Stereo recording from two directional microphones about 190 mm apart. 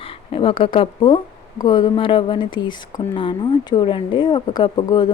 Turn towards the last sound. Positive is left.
turn(degrees=25)  # may be behind; listen again after turning